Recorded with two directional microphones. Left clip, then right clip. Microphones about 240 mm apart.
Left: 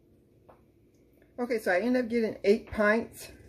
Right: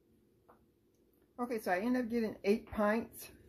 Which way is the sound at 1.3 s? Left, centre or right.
Centre.